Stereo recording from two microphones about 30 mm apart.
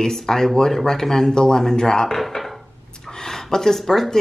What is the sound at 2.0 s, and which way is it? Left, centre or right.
Speech, centre.